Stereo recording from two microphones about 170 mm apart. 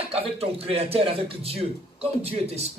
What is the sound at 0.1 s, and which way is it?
A man's voice, 35° right (ahead or behind).